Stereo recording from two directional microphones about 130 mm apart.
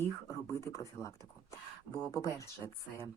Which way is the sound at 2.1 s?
25° left (ahead or behind).